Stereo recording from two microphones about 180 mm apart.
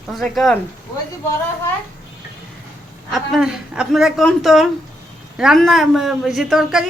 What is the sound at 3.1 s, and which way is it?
A woman's voice, centre (ahead or behind).